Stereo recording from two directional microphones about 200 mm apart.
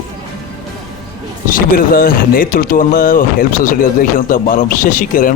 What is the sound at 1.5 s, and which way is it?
A man's voice, 45° left (ahead or behind).